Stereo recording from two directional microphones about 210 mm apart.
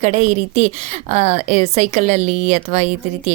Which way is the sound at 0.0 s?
35° right (ahead or behind).